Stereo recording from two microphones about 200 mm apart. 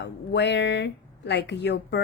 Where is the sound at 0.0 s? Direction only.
60° left (ahead or behind).